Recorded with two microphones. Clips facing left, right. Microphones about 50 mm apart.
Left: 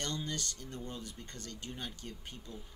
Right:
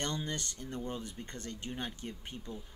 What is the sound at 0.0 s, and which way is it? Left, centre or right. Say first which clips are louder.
Speech: right 2 dB; right.